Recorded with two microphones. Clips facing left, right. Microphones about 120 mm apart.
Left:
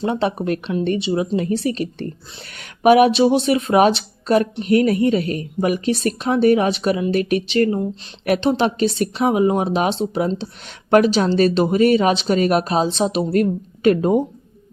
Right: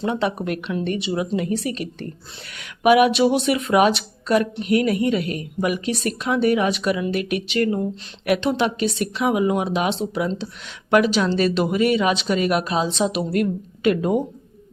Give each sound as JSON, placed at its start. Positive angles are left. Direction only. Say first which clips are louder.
{"t": 0.0, "sound": "speech", "louder": "left 2 dB", "side_deg": 30}